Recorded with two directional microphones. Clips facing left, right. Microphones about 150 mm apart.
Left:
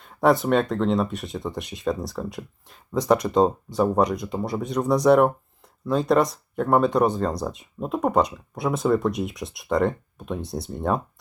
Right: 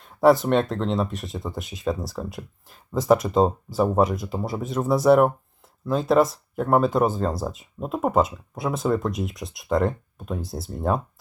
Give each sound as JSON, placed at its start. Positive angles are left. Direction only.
{"t": 0.0, "sound": "speech", "side_deg": 0}